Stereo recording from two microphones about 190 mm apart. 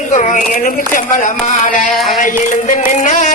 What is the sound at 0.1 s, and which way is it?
Speech, 40° left (ahead or behind).